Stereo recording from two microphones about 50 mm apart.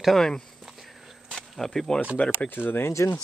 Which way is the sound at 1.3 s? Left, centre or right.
Centre.